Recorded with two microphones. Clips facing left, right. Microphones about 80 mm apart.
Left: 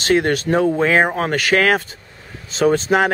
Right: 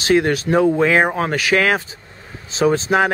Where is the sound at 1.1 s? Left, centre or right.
Centre.